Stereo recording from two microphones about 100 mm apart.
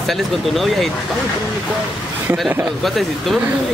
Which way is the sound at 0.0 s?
Centre (ahead or behind).